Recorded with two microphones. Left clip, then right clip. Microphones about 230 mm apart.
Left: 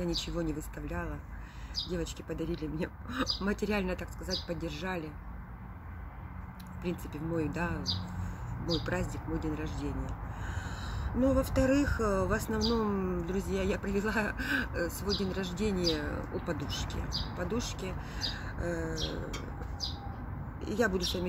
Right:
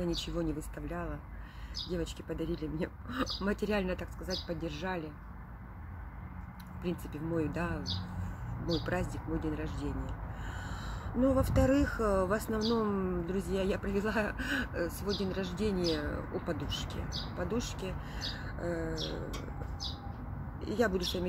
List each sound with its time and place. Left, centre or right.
0.0 s speech: centre
6.8 s speech: centre
8.8 s speech: centre
20.6 s speech: centre